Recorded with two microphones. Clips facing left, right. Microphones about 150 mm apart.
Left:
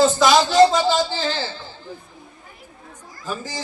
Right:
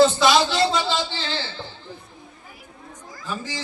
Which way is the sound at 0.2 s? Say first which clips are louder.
Left 5 dB; 45° left (ahead or behind).